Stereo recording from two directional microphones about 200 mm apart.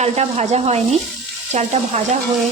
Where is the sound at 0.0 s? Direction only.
35° right (ahead or behind).